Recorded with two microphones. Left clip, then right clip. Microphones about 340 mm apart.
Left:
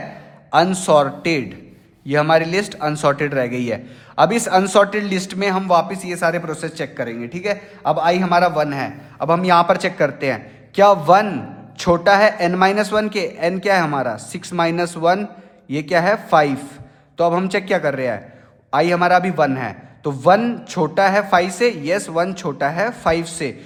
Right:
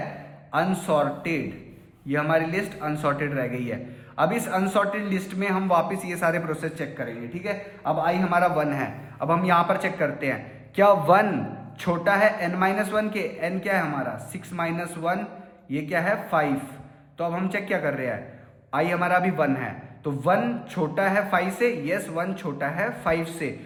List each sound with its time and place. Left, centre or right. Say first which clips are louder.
0.5 s a man's voice: left 10 dB; centre